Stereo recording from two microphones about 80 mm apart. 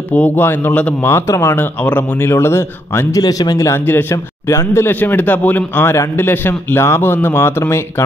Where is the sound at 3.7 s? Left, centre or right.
Left.